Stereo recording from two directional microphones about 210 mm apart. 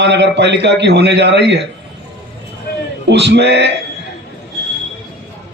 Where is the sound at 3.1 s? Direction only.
55° right (ahead or behind).